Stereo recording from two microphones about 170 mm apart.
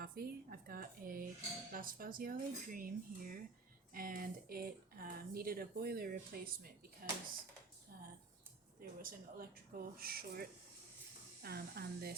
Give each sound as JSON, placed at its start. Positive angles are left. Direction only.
{"t": 0.0, "sound": "speech", "side_deg": -65}
{"t": 8.8, "sound": "speech", "side_deg": -55}